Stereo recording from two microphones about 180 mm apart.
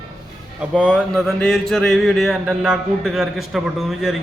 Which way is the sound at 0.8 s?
5° right (ahead or behind).